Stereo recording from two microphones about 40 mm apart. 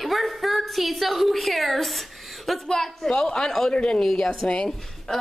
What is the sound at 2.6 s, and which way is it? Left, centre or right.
Speech, centre.